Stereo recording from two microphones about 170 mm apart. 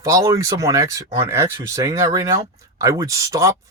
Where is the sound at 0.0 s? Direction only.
20° right (ahead or behind).